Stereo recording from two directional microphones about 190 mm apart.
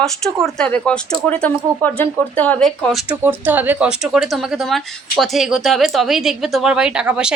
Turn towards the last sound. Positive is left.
turn(degrees=-5)  # may be behind; listen again after turning